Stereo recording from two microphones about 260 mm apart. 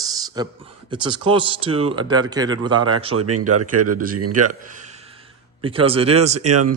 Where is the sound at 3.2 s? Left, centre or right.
Right.